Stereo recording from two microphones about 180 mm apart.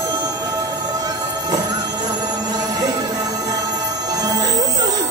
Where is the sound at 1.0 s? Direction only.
20° right (ahead or behind).